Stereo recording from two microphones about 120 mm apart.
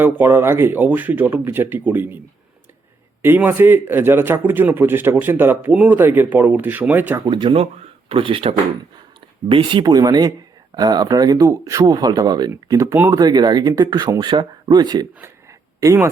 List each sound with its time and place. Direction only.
0.0 s speech: 20° right (ahead or behind)
7.3 s speech: 40° right (ahead or behind); by 16.0 s 25° right (ahead or behind)